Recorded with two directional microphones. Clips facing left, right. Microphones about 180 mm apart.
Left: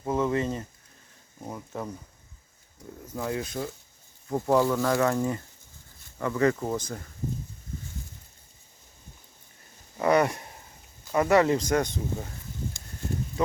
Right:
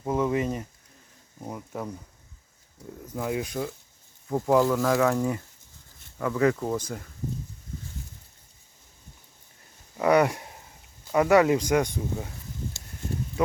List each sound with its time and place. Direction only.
0.1 s speech: 10° right (ahead or behind)
3.1 s speech: 15° right (ahead or behind)
6.7 s speech: 10° right (ahead or behind)
10.0 s speech: 10° right (ahead or behind)